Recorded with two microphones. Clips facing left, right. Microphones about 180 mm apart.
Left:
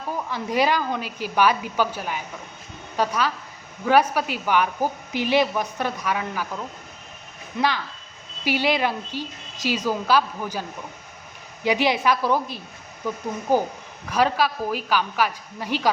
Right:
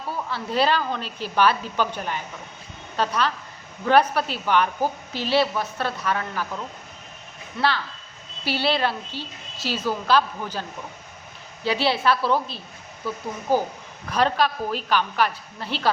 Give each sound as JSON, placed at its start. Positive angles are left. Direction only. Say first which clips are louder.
{"t": 0.1, "sound": "a woman's voice", "louder": "left 1 dB", "side_deg": 15}
{"t": 8.4, "sound": "a woman's voice", "louder": "left 1 dB", "side_deg": 15}